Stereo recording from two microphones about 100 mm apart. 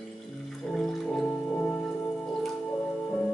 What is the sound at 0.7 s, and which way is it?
Music, 5° left (ahead or behind).